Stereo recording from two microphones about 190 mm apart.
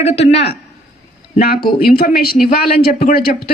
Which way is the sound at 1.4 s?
50° left (ahead or behind).